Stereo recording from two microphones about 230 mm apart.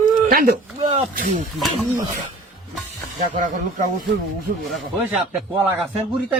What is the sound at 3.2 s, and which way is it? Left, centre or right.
Speech, right.